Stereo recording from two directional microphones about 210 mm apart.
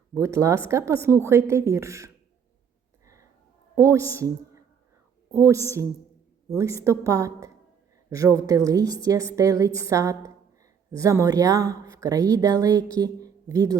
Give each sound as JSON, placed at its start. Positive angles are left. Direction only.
{"t": 0.1, "sound": "a woman's voice", "side_deg": -15}
{"t": 3.8, "sound": "a woman's voice", "side_deg": -15}